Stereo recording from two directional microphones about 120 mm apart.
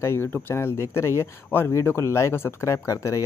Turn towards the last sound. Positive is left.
turn(degrees=25)  # may be behind; listen again after turning